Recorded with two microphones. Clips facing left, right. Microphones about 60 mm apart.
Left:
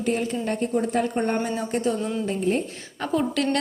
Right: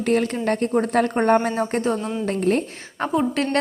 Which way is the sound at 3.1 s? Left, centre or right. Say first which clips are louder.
Right 1 dB; right.